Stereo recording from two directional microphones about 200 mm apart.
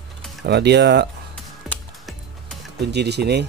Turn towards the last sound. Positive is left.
turn(degrees=-55)  # may be behind; listen again after turning